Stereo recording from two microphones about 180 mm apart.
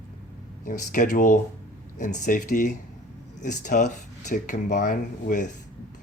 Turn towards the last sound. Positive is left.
turn(degrees=45)  # may be behind; listen again after turning